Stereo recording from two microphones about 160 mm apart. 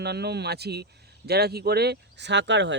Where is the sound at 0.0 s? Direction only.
90° right.